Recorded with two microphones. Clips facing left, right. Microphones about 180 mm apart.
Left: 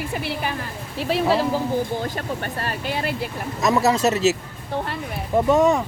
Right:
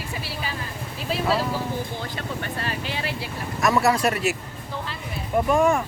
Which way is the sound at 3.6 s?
20° left (ahead or behind).